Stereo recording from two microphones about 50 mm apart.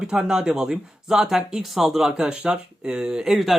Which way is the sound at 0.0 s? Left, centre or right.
Centre.